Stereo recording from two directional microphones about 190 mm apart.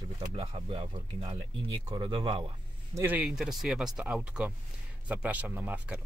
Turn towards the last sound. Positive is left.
turn(degrees=-5)  # may be behind; listen again after turning